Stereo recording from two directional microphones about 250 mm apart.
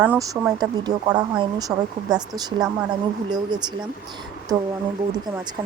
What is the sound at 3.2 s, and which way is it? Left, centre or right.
Speech, centre.